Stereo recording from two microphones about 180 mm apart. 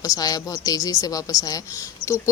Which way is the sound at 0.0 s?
20° left (ahead or behind).